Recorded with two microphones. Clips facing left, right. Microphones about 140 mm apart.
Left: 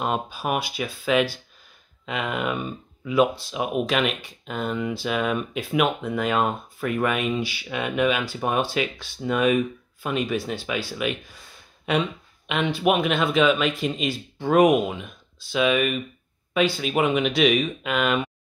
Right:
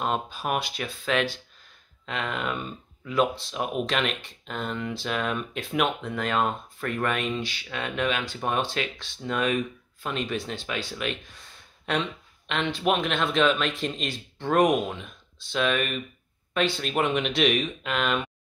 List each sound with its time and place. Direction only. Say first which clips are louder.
0.0 s speech: left 2 dB; 5° left (ahead or behind)